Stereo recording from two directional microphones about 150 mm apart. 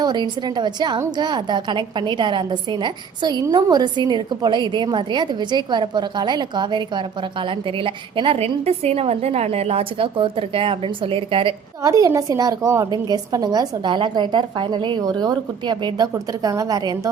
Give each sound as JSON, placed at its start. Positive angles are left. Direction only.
{"t": 0.0, "sound": "a woman's voice", "side_deg": -30}
{"t": 11.8, "sound": "a woman's voice", "side_deg": -25}